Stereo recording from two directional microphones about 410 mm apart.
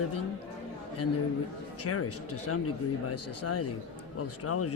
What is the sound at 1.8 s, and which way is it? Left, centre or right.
Speech, left.